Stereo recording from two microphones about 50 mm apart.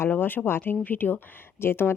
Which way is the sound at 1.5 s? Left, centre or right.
Left.